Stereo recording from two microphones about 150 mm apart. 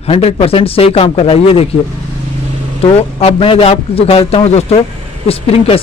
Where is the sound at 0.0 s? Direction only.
40° left (ahead or behind).